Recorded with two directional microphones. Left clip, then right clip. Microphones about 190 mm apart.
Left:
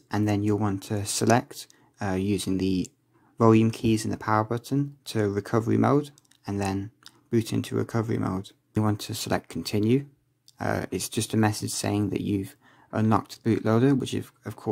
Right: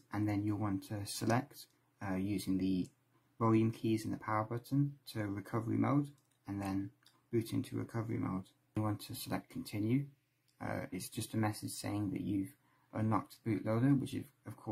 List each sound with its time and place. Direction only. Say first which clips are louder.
0.1 s speech: left 11 dB; 35° left (ahead or behind)